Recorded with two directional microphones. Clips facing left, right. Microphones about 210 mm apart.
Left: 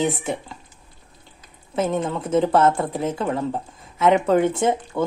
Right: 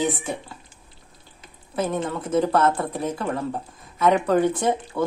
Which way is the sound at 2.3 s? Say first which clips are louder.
Left 3 dB; 25° left (ahead or behind).